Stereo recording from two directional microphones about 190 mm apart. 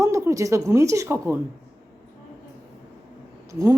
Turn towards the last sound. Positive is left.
turn(degrees=-15)  # may be behind; listen again after turning